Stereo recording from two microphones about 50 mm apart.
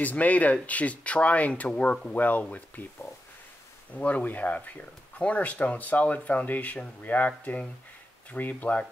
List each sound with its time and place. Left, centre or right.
0.0 s speech: left
2.1 s speech: left
3.9 s speech: left